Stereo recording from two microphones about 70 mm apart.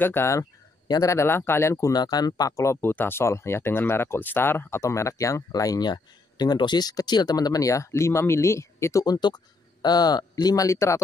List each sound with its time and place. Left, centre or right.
0.0 s speech: left
1.9 s speech: left
2.5 s speech: left
4.8 s speech: left
5.5 s speech: left
9.0 s speech: left